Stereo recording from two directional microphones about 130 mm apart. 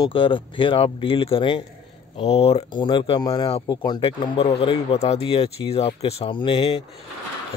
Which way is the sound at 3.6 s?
35° left (ahead or behind).